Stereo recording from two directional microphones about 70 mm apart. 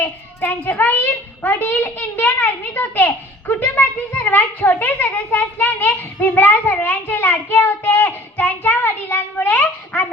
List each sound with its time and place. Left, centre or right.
0.0 s child singing: left
1.4 s a child's voice: left